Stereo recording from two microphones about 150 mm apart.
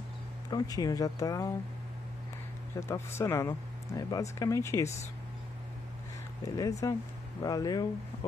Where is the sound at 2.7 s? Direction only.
20° left (ahead or behind).